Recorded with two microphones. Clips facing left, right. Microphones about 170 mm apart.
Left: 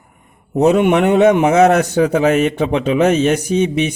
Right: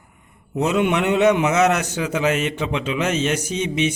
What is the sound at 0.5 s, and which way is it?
Speech, 50° left (ahead or behind).